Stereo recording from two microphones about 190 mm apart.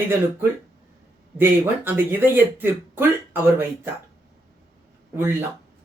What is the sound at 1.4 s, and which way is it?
Speech, 10° right (ahead or behind).